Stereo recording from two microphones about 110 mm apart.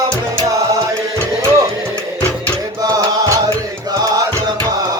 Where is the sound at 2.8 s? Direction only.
35° right (ahead or behind).